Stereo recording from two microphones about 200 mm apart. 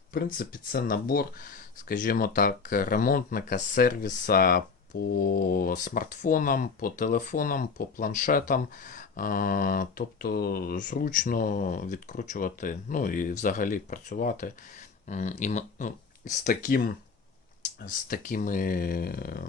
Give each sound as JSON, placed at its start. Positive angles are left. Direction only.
{"t": 0.1, "sound": "speech", "side_deg": 45}